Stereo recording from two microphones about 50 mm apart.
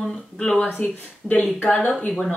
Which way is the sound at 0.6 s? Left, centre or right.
Left.